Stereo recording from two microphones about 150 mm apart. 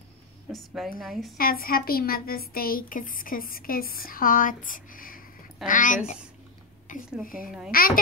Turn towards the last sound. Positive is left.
turn(degrees=-5)  # may be behind; listen again after turning